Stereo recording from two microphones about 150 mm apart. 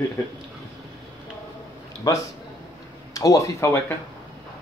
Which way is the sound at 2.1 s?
20° left (ahead or behind).